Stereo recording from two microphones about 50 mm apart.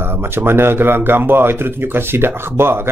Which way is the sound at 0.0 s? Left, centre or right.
Right.